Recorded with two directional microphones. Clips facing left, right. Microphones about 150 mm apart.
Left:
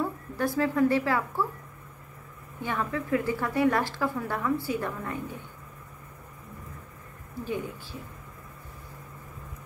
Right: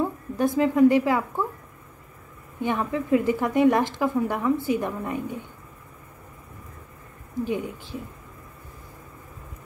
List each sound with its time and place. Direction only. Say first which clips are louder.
0.0 s speech: right 5 dB; 20° right (ahead or behind)
2.6 s a woman's voice: right 5 dB; 20° right (ahead or behind)
7.4 s speech: right 3 dB; 15° right (ahead or behind)